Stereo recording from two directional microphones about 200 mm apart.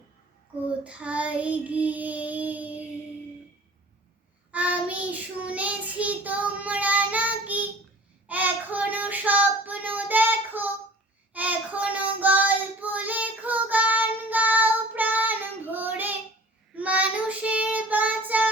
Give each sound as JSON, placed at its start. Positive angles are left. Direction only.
{"t": 0.9, "sound": "child singing", "side_deg": -5}
{"t": 4.5, "sound": "child singing", "side_deg": -10}